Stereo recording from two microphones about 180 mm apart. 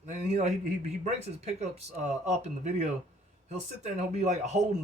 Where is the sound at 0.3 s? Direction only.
40° right (ahead or behind).